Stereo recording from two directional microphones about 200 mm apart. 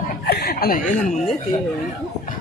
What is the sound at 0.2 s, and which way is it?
Chuckle, 50° left (ahead or behind).